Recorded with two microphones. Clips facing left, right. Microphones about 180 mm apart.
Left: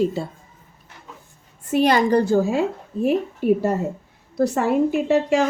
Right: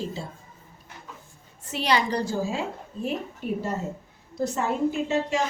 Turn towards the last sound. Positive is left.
turn(degrees=65)  # may be behind; listen again after turning